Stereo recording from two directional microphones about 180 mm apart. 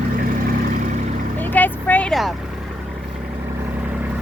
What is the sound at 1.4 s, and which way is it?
Vehicle, 10° left (ahead or behind).